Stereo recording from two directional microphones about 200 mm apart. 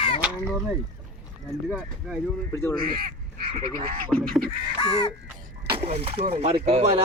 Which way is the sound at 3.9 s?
45° right (ahead or behind).